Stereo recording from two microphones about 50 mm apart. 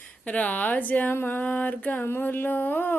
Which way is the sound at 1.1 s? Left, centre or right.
Left.